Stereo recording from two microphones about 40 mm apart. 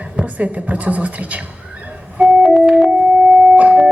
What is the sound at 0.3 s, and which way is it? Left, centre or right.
Speech, right.